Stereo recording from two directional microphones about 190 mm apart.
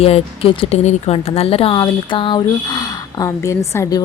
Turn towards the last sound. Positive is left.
turn(degrees=15)  # may be behind; listen again after turning